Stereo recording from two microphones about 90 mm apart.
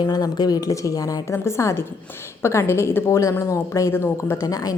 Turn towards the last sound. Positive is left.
turn(degrees=40)  # may be behind; listen again after turning